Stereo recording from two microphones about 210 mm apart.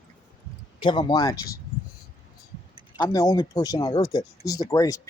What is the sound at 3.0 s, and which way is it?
Speech, 15° left (ahead or behind).